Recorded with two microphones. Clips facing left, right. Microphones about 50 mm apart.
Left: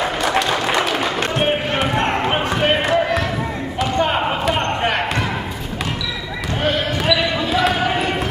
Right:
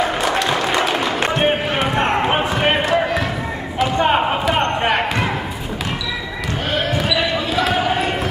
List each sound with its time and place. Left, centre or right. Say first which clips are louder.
0.2 s applause: even; centre
1.3 s basketball bounce: right 1 dB; centre
4.0 s basketball bounce: right 2 dB; centre
7.0 s basketball bounce: left 1 dB; centre